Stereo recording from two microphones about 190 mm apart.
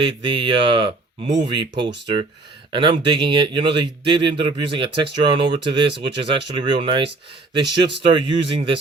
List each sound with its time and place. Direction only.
0.0 s speech: 25° right (ahead or behind)